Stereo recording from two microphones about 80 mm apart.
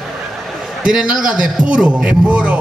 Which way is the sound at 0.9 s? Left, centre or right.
Centre.